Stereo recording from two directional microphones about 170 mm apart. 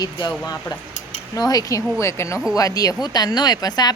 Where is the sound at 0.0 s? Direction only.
25° left (ahead or behind).